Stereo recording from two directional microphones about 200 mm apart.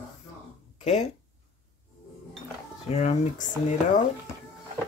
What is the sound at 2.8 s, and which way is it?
Speech, 30° left (ahead or behind).